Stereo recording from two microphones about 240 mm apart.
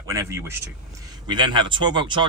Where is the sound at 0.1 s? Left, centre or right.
Centre.